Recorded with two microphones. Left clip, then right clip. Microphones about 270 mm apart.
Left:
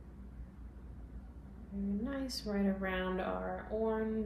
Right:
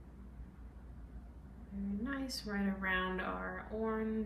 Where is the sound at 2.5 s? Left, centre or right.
Centre.